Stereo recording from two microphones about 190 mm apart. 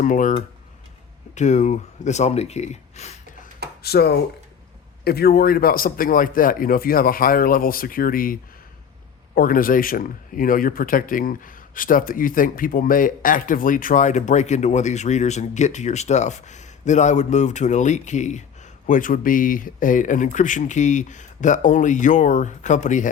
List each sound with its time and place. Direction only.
0.0 s speech: 45° left (ahead or behind)
3.8 s speech: 60° left (ahead or behind); by 23.0 s 40° left (ahead or behind)